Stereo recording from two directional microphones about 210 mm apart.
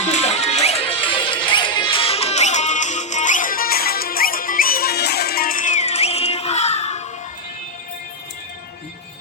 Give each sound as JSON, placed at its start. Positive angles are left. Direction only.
{"t": 0.0, "sound": "music", "side_deg": 30}